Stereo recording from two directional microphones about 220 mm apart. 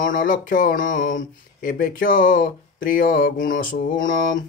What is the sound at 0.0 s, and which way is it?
Speech, 40° left (ahead or behind).